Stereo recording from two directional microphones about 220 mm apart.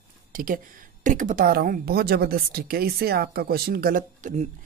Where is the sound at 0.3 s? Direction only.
40° right (ahead or behind).